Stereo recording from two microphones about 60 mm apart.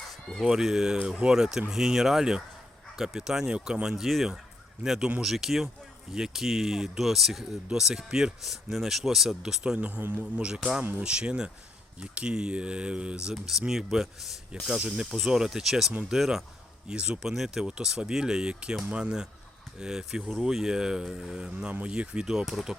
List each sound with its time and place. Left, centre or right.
0.4 s speech: centre
9.7 s a man's voice: right
10.0 s a man's voice: right
10.3 s speech: centre
16.9 s a man's voice: centre
17.2 s speech: centre
22.3 s speech: centre